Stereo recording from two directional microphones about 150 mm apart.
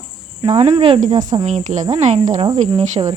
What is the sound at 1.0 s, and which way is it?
Speech, 25° right (ahead or behind).